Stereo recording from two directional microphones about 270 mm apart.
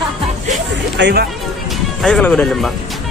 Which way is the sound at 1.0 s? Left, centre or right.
Right.